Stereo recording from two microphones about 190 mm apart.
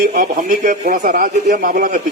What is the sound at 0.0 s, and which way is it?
A man's voice, 55° right (ahead or behind).